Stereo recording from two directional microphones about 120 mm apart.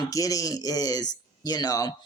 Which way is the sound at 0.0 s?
30° left (ahead or behind).